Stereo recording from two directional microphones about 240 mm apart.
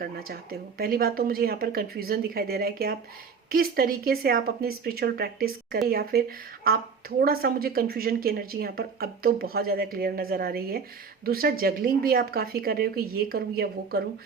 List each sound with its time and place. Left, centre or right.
0.0 s a woman's voice: right